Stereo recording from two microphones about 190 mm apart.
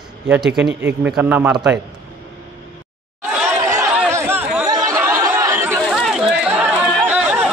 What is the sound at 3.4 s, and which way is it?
Chatter, 15° right (ahead or behind).